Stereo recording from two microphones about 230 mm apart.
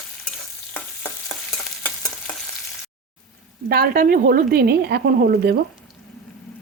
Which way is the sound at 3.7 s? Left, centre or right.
Right.